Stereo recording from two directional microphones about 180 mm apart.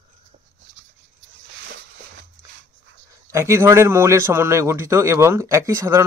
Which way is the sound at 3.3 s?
15° right (ahead or behind).